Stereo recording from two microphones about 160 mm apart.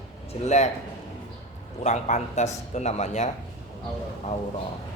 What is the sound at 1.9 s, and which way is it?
Speech, 45° left (ahead or behind).